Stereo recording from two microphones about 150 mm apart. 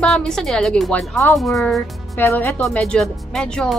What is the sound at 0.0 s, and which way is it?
Speech, 5° left (ahead or behind).